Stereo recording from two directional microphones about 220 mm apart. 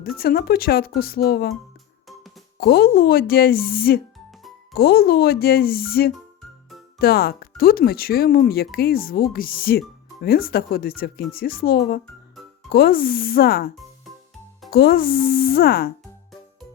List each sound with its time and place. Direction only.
0.2 s speech: 45° left (ahead or behind)
2.6 s speech: 45° left (ahead or behind)
14.7 s speech: 45° left (ahead or behind)